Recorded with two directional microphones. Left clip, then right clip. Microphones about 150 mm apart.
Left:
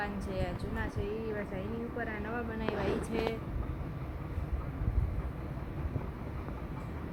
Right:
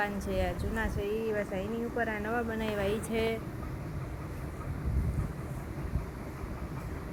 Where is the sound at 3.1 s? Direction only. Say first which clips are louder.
Right 5 dB; centre (ahead or behind).